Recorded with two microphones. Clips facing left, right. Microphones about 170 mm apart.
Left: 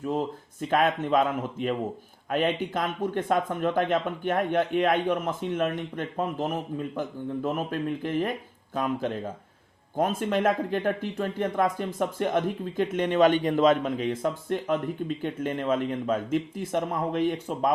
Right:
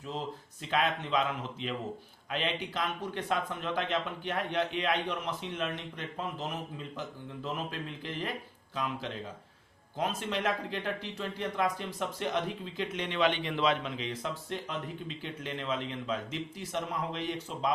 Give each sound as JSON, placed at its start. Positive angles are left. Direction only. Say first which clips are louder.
{"t": 0.0, "sound": "speech", "louder": "left 9 dB", "side_deg": 50}